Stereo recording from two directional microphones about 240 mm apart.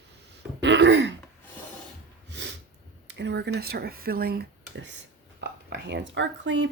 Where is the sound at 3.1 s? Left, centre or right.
Right.